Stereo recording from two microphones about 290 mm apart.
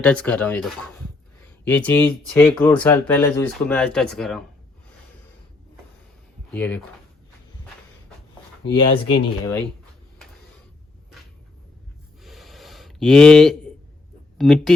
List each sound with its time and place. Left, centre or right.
0.0 s speech: centre
6.5 s speech: centre
8.7 s speech: centre
12.2 s a sound: centre
14.3 s speech: centre